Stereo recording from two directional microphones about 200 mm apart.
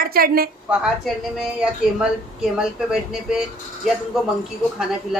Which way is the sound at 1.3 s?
5° right (ahead or behind).